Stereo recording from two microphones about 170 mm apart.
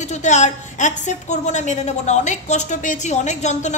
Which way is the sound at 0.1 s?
45° left (ahead or behind).